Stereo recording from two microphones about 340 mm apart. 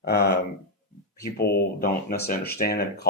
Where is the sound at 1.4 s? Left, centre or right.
Left.